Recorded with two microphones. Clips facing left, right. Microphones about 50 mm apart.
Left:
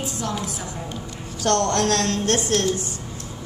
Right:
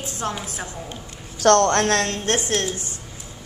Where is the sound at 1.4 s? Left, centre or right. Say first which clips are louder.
Right 4 dB; right.